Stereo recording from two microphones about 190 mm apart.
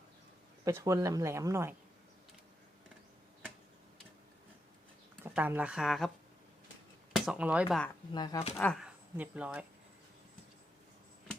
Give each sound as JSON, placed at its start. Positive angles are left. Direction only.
{"t": 0.6, "sound": "speech", "side_deg": -15}
{"t": 5.2, "sound": "speech", "side_deg": -10}
{"t": 7.3, "sound": "speech", "side_deg": -5}
{"t": 8.1, "sound": "speech", "side_deg": 20}
{"t": 8.5, "sound": "speech", "side_deg": 5}
{"t": 9.1, "sound": "speech", "side_deg": -10}